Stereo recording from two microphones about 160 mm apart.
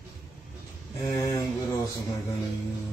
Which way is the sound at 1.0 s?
25° left (ahead or behind).